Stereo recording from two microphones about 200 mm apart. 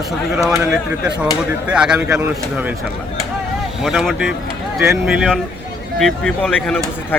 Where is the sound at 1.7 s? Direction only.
5° right (ahead or behind).